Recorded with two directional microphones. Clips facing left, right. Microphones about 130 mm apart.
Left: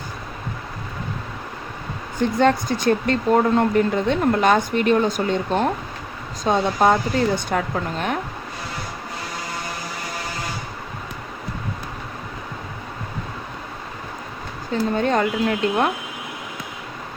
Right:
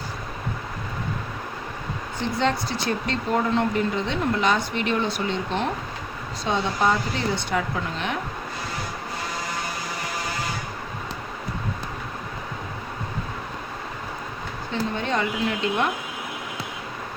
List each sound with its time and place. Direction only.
2.4 s speech: 50° left (ahead or behind)
14.7 s speech: 45° left (ahead or behind)